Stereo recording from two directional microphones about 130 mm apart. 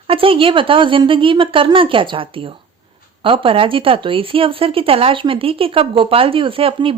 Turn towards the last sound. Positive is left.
turn(degrees=-45)  # may be behind; listen again after turning